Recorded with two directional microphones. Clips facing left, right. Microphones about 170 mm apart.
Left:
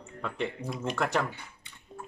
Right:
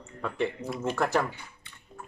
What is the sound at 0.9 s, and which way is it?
Speech, 5° right (ahead or behind).